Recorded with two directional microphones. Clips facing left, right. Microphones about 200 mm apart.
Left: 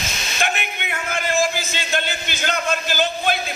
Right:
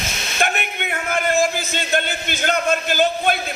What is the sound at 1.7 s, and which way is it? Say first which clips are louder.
A man's voice: right 3 dB; 50° right (ahead or behind).